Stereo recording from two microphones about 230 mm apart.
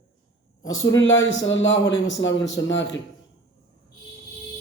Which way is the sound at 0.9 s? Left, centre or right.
Left.